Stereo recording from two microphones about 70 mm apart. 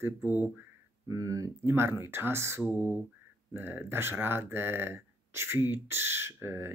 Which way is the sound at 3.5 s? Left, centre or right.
Right.